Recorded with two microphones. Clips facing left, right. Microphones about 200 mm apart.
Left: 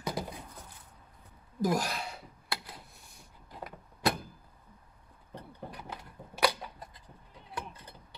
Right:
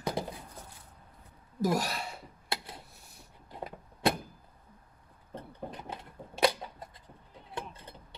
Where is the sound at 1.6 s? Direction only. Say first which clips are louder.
Even; 5° right (ahead or behind).